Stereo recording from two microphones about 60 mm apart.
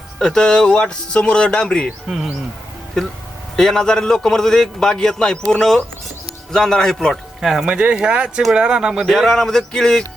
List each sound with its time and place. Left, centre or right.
0.2 s a man's voice: centre
2.0 s speech: centre
3.5 s a man's voice: centre
7.4 s speech: centre
7.7 s speech: centre
9.0 s a man's voice: centre